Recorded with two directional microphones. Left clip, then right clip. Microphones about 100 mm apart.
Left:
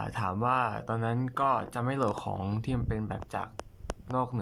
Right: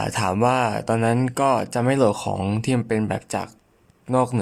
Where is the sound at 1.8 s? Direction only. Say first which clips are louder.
Right 13 dB; 40° right (ahead or behind).